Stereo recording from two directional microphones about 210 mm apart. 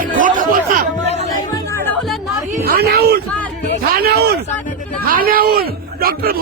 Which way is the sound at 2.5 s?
45° right (ahead or behind).